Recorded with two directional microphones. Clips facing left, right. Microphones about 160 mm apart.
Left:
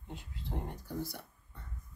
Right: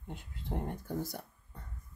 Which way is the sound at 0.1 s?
50° right (ahead or behind).